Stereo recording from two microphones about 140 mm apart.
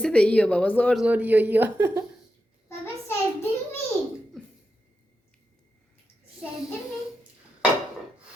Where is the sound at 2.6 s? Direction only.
15° left (ahead or behind).